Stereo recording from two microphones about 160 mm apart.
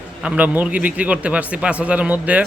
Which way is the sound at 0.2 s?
10° right (ahead or behind).